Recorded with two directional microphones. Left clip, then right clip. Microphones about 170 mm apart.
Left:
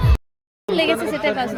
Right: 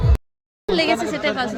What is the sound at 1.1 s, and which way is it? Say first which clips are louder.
Speech: left 1 dB; 5° left (ahead or behind).